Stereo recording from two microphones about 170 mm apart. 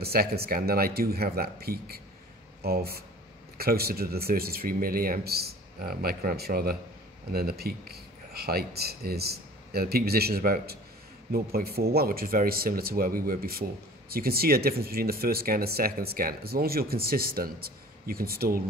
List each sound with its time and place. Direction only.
0.0 s speech: 65° right (ahead or behind)